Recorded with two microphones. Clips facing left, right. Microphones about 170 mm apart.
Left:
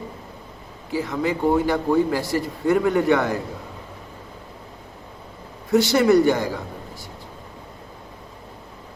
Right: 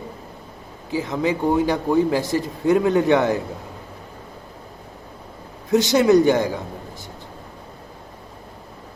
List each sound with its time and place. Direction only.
0.9 s a man's voice: 20° right (ahead or behind)
5.7 s a man's voice: 20° right (ahead or behind)